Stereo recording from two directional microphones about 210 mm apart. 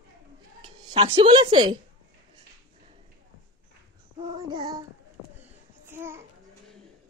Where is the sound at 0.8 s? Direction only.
25° right (ahead or behind).